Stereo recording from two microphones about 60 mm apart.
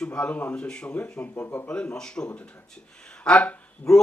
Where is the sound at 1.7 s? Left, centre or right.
Centre.